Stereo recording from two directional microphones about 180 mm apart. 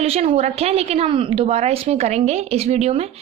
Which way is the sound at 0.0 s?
35° right (ahead or behind).